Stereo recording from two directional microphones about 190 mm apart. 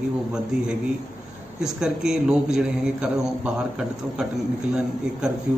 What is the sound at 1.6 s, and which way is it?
A man's voice, 5° right (ahead or behind).